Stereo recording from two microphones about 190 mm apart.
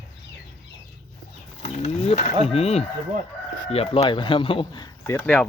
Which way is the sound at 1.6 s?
35° left (ahead or behind).